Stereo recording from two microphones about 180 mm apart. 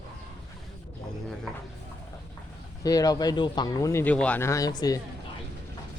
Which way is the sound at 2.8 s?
20° left (ahead or behind).